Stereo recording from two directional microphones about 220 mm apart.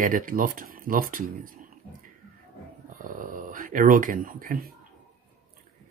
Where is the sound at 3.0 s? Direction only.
40° right (ahead or behind).